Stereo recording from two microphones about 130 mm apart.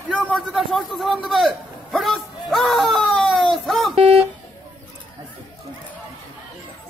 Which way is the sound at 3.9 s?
45° right (ahead or behind).